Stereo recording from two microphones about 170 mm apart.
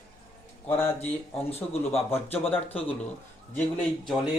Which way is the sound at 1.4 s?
35° left (ahead or behind).